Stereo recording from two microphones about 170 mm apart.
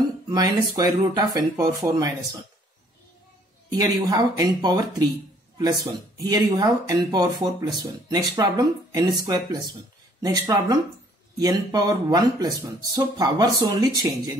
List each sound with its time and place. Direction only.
0.3 s speech: 20° right (ahead or behind)
3.8 s speech: 20° right (ahead or behind)